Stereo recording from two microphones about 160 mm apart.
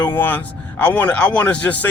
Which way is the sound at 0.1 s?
10° left (ahead or behind).